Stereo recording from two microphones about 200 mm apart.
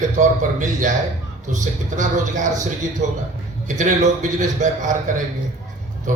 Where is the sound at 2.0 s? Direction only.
40° right (ahead or behind).